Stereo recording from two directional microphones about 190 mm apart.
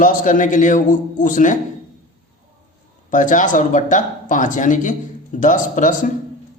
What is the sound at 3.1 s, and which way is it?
A man's voice, 45° left (ahead or behind).